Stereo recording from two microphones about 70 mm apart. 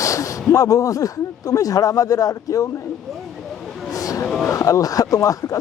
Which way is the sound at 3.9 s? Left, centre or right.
Left.